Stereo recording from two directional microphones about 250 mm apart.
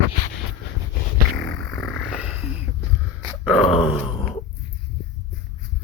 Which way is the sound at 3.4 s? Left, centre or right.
Centre.